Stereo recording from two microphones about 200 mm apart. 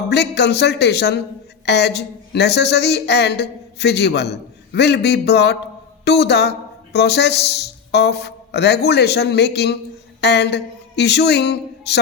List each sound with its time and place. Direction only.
0.1 s a woman's voice: 55° left (ahead or behind)